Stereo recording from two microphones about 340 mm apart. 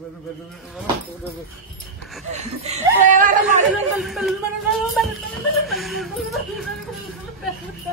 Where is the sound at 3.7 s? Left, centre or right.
Centre.